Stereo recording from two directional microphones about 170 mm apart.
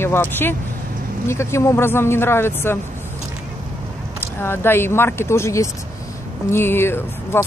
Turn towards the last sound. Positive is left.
turn(degrees=15)  # may be behind; listen again after turning